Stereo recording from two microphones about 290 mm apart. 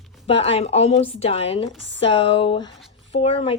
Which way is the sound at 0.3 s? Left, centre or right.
Centre.